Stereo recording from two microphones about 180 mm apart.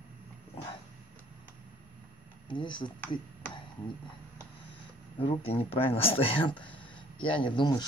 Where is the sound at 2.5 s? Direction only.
25° left (ahead or behind).